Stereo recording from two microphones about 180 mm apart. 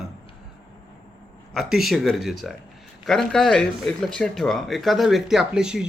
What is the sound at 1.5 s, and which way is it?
Speech, centre (ahead or behind).